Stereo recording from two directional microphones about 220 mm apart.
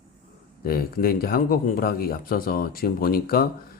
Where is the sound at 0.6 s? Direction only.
40° left (ahead or behind).